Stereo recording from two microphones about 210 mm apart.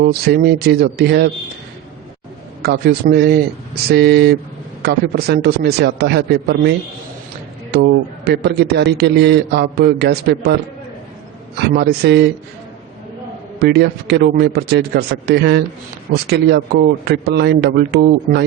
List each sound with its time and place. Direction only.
0.0 s a man's voice: 45° right (ahead or behind)
2.6 s a man's voice: 50° right (ahead or behind)
11.5 s a man's voice: 50° right (ahead or behind)
13.6 s a man's voice: 50° right (ahead or behind)